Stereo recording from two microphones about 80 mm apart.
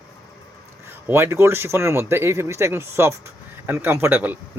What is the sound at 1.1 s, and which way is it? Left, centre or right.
Speech, right.